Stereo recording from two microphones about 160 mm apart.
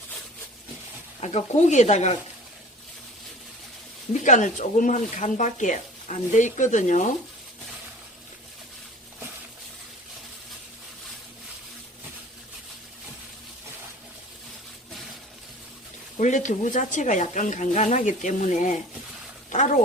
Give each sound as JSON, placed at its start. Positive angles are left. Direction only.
{"t": 1.2, "sound": "speech", "side_deg": 45}
{"t": 4.1, "sound": "speech", "side_deg": 50}
{"t": 16.1, "sound": "speech", "side_deg": 50}